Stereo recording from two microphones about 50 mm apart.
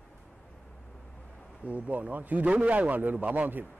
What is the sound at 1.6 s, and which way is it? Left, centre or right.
A man's voice, right.